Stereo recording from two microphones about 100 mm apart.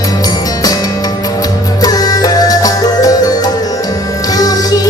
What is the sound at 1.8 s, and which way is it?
Music, 40° left (ahead or behind).